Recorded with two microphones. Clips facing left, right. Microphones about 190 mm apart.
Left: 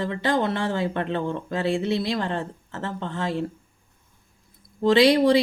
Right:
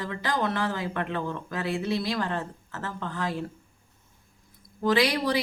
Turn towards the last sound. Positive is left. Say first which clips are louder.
# left 7 dB
turn(degrees=25)  # may be behind; listen again after turning